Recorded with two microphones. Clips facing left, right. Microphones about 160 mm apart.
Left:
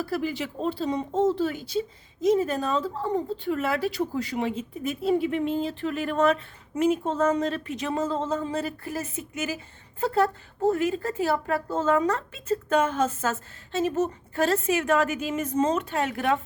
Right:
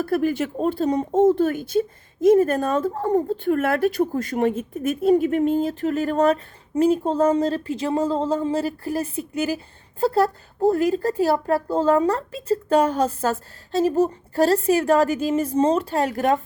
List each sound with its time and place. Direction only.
0.0 s a woman's voice: 50° right (ahead or behind)